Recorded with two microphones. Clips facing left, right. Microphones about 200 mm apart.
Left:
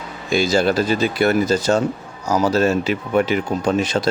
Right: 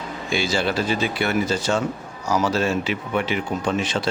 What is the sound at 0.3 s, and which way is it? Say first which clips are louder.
Speech: left 6 dB; 40° left (ahead or behind).